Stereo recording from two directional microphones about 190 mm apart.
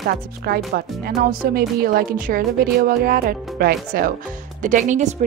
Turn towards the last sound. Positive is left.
turn(degrees=-40)  # may be behind; listen again after turning